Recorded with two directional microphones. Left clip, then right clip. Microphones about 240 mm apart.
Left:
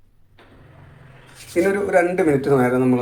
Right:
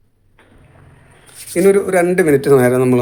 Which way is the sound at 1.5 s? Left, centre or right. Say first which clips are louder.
Right 5 dB; right.